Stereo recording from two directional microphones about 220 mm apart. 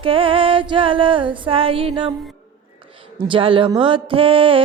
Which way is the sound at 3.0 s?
25° right (ahead or behind).